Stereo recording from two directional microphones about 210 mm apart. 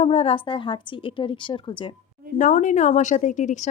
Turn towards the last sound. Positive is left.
turn(degrees=35)  # may be behind; listen again after turning